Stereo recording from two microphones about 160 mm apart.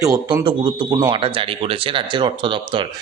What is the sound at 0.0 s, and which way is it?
Speech, 20° right (ahead or behind).